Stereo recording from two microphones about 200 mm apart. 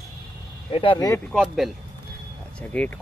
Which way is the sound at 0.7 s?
25° left (ahead or behind).